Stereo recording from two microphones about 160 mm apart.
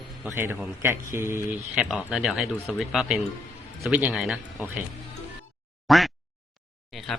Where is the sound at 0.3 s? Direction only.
15° right (ahead or behind).